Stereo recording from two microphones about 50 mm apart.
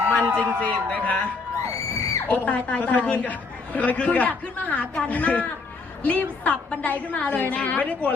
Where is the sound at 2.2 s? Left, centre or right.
Left.